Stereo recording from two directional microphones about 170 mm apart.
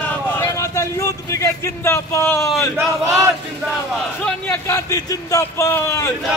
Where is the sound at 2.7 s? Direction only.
15° right (ahead or behind).